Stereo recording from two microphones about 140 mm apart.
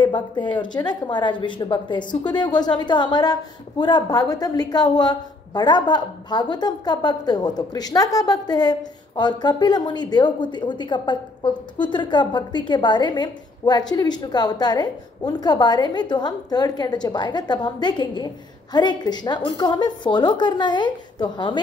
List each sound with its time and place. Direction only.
0.0 s a woman's voice: 35° left (ahead or behind)